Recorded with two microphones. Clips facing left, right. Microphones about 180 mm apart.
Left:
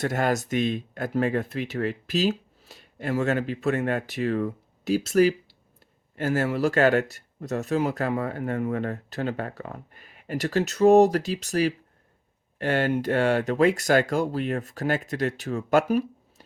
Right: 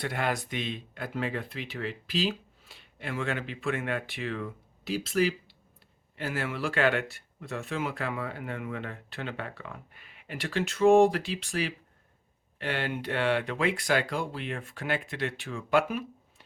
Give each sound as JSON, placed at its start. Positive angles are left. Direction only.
{"t": 0.0, "sound": "speech", "side_deg": 45}